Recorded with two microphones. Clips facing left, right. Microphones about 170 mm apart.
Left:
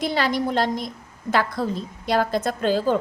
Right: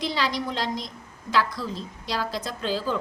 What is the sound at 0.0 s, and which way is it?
A woman's voice, 50° left (ahead or behind).